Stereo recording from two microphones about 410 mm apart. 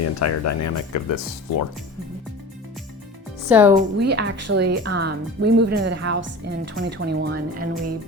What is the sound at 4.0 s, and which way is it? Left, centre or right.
Speech, right.